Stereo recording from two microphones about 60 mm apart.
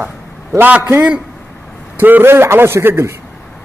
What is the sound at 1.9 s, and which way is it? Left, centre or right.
A man's voice, right.